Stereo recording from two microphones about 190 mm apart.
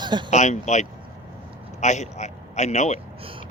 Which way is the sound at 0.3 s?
40° left (ahead or behind).